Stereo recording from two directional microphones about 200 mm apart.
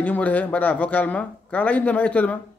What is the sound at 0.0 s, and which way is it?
A man's voice, 5° left (ahead or behind).